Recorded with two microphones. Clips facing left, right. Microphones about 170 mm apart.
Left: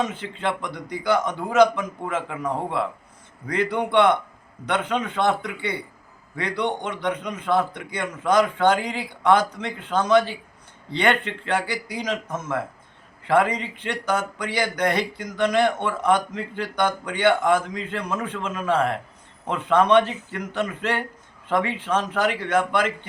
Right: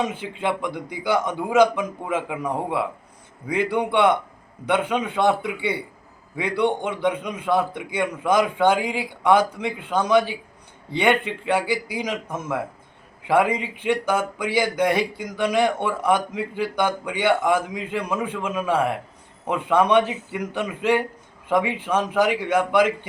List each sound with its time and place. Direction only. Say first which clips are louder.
0.0 s speech: right 1 dB; 10° right (ahead or behind)